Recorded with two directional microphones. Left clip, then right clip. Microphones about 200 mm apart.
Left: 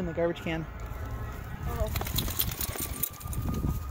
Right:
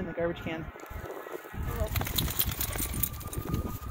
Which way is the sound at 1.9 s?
5° left (ahead or behind).